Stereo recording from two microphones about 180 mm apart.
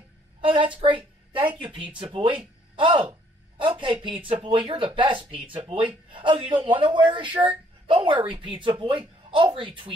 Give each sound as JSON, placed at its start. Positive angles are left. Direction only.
{"t": 0.4, "sound": "a woman's voice", "side_deg": -30}